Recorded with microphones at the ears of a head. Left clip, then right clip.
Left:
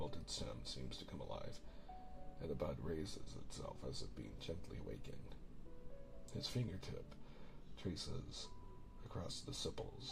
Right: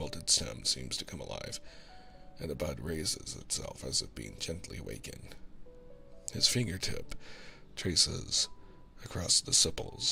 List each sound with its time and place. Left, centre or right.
0.0 s speech: right
6.2 s speech: right